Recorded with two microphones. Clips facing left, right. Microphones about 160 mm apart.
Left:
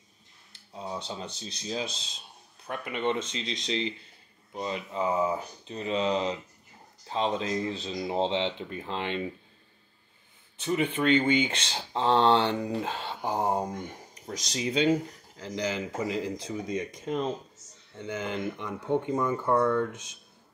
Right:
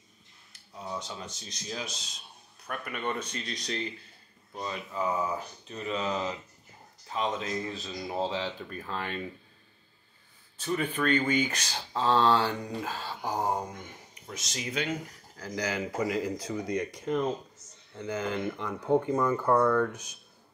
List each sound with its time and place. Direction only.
0.5 s speech: 30° left (ahead or behind)
10.6 s speech: 20° left (ahead or behind)
14.2 s speech: 35° left (ahead or behind)